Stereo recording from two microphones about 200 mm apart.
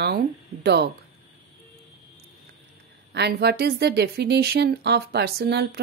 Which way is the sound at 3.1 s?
55° right (ahead or behind).